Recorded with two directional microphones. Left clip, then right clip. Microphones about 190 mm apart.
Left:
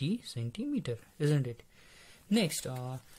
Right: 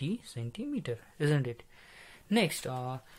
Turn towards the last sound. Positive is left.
turn(degrees=15)  # may be behind; listen again after turning